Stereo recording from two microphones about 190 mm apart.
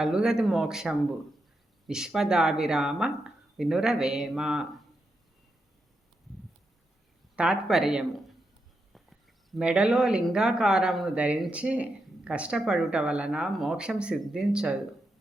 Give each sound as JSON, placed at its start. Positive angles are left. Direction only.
{"t": 0.0, "sound": "speech", "side_deg": -5}
{"t": 7.3, "sound": "speech", "side_deg": -5}